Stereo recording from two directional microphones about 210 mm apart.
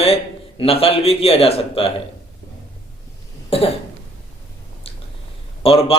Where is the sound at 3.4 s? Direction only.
30° left (ahead or behind).